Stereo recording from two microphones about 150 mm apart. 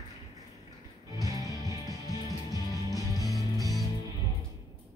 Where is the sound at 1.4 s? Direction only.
20° right (ahead or behind).